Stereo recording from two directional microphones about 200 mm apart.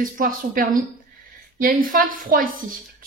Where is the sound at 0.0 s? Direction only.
45° right (ahead or behind).